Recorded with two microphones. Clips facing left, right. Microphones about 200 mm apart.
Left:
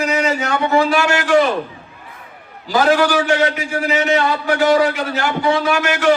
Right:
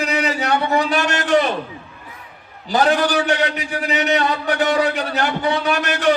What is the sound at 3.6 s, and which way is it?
Speech, 20° right (ahead or behind).